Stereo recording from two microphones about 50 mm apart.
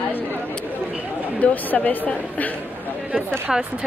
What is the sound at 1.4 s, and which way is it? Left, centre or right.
A woman's voice, left.